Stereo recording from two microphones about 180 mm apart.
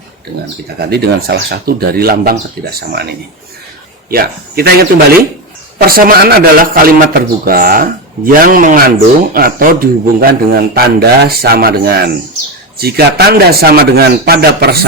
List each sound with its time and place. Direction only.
0.8 s a man's voice: 65° right (ahead or behind)